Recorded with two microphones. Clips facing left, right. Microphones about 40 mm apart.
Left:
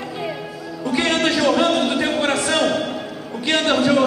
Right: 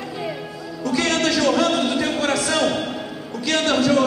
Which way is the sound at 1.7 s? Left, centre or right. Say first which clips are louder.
Left 2 dB; centre.